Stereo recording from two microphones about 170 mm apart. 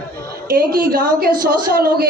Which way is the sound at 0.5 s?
60° right (ahead or behind).